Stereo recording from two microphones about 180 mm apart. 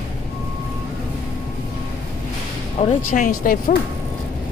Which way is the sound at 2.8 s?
45° left (ahead or behind).